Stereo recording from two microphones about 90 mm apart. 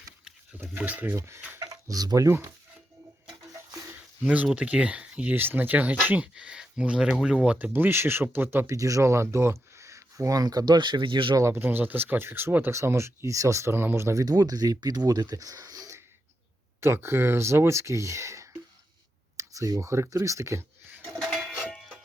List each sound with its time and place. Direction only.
0.5 s speech: 20° right (ahead or behind)
1.5 s speech: 40° right (ahead or behind)
4.2 s speech: 15° right (ahead or behind)
7.7 s speech: 25° right (ahead or behind)
8.6 s speech: 35° right (ahead or behind); by 11.3 s 65° right (ahead or behind)
11.3 s speech: 30° right (ahead or behind)
16.8 s speech: 30° right (ahead or behind)
21.6 s music: 5° left (ahead or behind)